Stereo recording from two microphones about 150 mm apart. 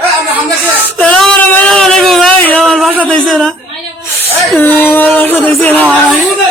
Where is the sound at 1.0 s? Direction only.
5° left (ahead or behind).